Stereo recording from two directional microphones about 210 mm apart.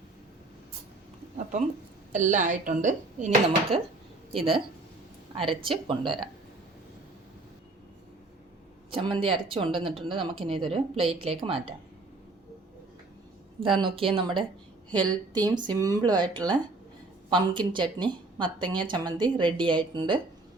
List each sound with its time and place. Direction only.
2.1 s speech: 35° right (ahead or behind)
5.6 s speech: 25° right (ahead or behind)
8.9 s speech: 25° right (ahead or behind)
13.7 s a woman's voice: 25° right (ahead or behind)